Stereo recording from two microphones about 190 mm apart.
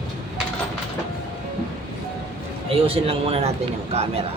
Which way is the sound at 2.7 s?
30° right (ahead or behind).